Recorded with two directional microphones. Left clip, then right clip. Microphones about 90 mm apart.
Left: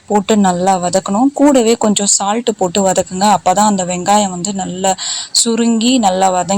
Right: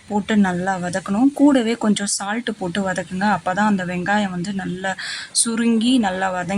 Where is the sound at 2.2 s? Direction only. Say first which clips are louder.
Left 9 dB; 50° left (ahead or behind).